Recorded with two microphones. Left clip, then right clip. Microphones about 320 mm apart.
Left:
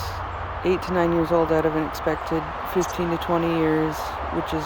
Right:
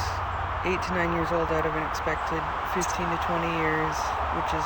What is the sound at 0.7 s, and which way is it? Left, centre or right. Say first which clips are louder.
Speech: left 6 dB; left.